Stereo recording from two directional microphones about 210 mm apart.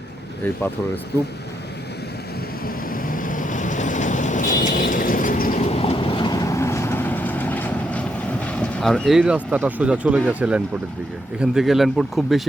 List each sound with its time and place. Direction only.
2.6 s vehicle: 40° left (ahead or behind)
5.6 s vehicle: 30° left (ahead or behind); by 10.2 s 5° right (ahead or behind)
10.2 s speech: 5° right (ahead or behind)